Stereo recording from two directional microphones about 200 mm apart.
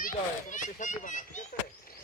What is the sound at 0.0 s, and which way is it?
Speech, 40° left (ahead or behind).